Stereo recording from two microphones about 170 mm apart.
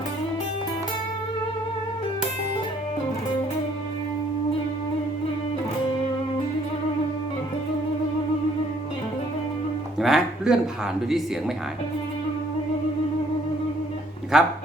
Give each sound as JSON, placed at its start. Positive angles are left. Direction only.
{"t": 10.0, "sound": "speech", "side_deg": -5}
{"t": 14.3, "sound": "a man's voice", "side_deg": -5}